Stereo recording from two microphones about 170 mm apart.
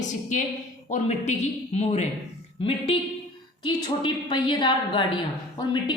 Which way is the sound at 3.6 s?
25° left (ahead or behind).